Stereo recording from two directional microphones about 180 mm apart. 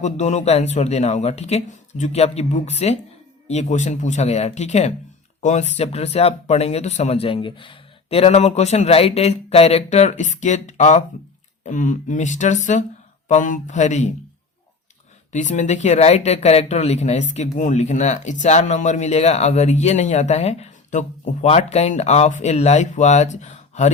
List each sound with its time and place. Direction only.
0.0 s speech: 40° left (ahead or behind)
15.3 s speech: 40° left (ahead or behind)